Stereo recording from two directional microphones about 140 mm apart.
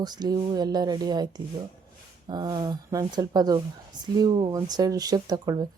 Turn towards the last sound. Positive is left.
turn(degrees=-30)  # may be behind; listen again after turning